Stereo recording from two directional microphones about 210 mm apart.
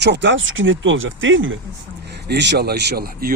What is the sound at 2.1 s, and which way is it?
Speech, 55° right (ahead or behind).